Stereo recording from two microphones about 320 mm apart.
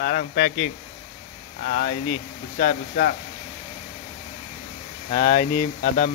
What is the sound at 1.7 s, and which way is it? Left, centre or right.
Speech, left.